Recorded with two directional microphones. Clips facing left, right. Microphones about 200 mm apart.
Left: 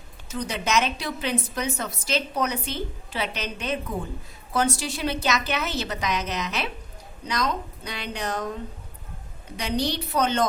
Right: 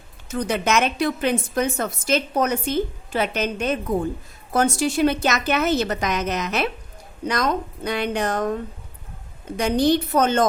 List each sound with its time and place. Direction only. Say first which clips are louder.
0.3 s a woman's voice: right 6 dB; 50° right (ahead or behind)
9.6 s a woman's voice: right 8 dB; 50° right (ahead or behind)